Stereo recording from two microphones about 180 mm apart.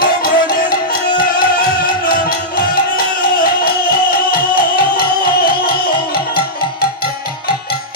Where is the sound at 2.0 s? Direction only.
55° left (ahead or behind).